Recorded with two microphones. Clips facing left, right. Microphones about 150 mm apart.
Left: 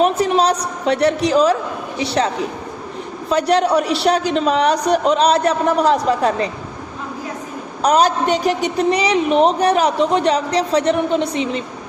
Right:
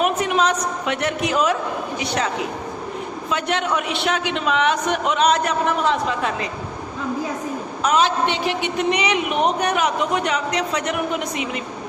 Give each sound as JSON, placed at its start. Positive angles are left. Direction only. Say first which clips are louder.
{"t": 0.0, "sound": "a woman's voice", "louder": "left 4 dB", "side_deg": 35}
{"t": 7.8, "sound": "a woman's voice", "louder": "left 4 dB", "side_deg": 40}